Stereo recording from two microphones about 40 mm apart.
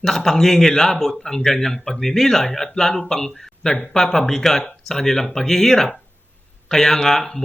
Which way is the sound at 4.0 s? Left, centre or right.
Centre.